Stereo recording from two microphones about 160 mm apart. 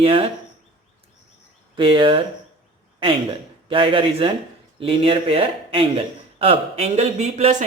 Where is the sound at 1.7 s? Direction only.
30° right (ahead or behind).